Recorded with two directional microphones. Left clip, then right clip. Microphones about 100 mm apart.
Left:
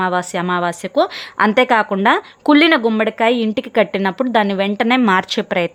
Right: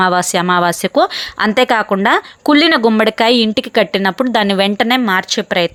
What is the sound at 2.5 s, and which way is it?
Speech, 10° right (ahead or behind).